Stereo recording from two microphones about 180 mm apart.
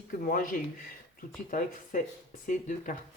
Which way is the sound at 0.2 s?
50° left (ahead or behind).